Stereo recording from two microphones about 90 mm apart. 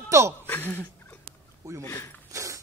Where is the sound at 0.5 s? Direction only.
20° left (ahead or behind).